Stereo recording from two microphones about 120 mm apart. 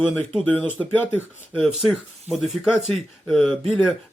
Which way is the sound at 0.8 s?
15° left (ahead or behind).